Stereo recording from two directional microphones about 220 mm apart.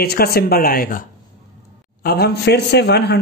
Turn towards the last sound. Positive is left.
turn(degrees=50)  # may be behind; listen again after turning